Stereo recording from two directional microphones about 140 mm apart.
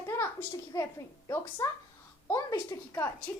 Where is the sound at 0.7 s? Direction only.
30° left (ahead or behind).